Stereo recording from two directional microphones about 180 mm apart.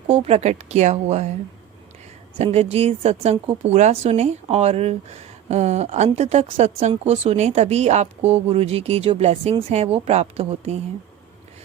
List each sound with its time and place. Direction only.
0.1 s speech: 35° right (ahead or behind)
2.4 s speech: 35° right (ahead or behind)